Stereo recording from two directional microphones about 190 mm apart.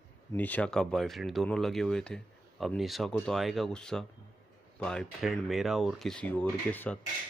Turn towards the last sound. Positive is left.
turn(degrees=10)  # may be behind; listen again after turning